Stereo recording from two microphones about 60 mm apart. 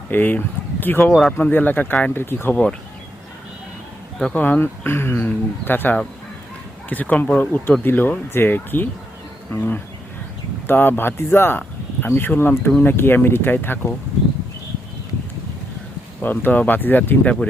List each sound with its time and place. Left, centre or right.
0.1 s speech: left
4.4 s speech: left
16.2 s speech: left